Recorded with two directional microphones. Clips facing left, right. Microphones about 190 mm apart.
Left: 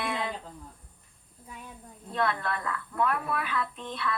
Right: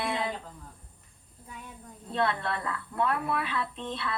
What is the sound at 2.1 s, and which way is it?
A woman's voice, 30° right (ahead or behind).